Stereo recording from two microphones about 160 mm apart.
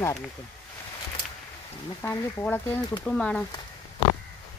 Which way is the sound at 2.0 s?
15° left (ahead or behind).